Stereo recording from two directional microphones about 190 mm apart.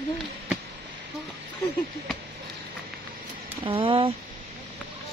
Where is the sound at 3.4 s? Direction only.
30° right (ahead or behind).